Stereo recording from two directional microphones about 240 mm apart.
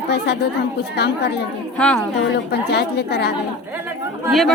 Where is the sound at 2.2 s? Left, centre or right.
Left.